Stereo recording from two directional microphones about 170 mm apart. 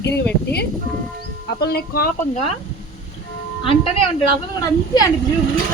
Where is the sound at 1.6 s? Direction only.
70° left (ahead or behind).